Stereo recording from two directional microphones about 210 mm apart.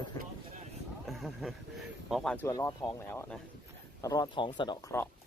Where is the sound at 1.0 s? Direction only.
Centre (ahead or behind).